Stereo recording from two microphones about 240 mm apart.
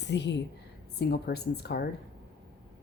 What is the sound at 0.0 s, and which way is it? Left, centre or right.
A woman's voice, left.